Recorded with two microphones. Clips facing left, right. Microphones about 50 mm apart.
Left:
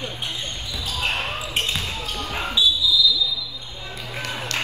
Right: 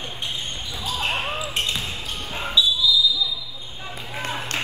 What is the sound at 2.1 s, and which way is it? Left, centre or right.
Basketball bounce, left.